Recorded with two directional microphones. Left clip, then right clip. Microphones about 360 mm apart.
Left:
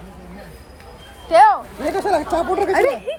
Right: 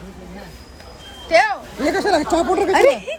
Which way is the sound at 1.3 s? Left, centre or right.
Centre.